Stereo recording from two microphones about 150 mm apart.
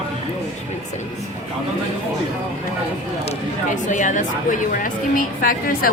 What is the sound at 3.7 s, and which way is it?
A woman's voice, 55° left (ahead or behind).